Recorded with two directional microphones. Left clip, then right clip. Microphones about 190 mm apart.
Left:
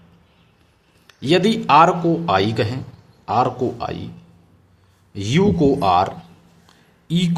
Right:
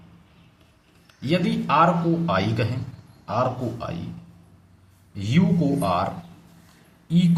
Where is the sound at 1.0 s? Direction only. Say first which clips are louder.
Left 8 dB; 50° left (ahead or behind).